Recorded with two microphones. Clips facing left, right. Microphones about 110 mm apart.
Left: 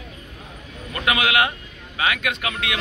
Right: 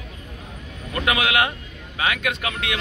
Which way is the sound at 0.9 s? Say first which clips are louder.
Even; 30° right (ahead or behind).